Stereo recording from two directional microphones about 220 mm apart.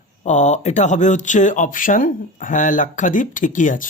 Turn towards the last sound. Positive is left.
turn(degrees=35)  # may be behind; listen again after turning